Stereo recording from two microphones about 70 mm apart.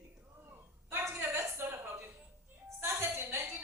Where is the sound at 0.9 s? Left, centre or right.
Right.